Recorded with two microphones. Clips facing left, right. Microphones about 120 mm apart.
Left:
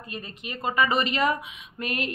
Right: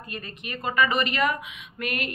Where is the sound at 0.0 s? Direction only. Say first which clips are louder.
Even; 25° left (ahead or behind).